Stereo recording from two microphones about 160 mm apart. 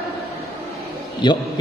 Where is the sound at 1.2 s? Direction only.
25° left (ahead or behind).